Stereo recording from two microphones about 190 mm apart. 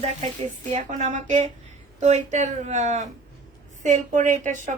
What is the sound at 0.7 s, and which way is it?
Speech, 35° right (ahead or behind).